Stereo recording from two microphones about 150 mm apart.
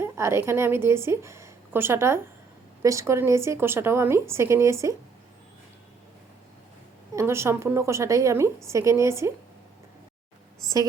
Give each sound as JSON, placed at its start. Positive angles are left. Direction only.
{"t": 0.0, "sound": "a woman's voice", "side_deg": -15}
{"t": 7.2, "sound": "a woman's voice", "side_deg": -15}